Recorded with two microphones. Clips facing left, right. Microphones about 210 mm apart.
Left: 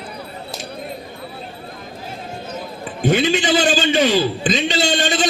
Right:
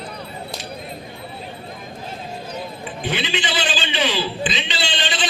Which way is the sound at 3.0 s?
45° left (ahead or behind).